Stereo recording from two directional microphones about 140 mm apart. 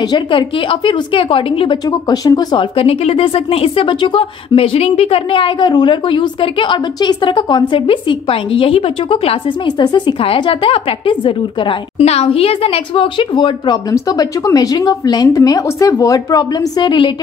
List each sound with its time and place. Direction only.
0.0 s speech: 35° left (ahead or behind)
1.9 s a woman's voice: 30° left (ahead or behind)
2.7 s speech: 45° left (ahead or behind)
9.7 s a woman's voice: 30° left (ahead or behind)